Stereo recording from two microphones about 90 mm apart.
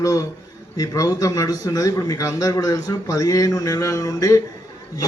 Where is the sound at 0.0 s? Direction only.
40° left (ahead or behind).